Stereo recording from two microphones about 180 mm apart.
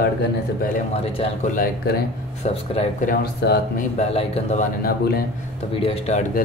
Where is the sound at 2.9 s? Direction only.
55° left (ahead or behind).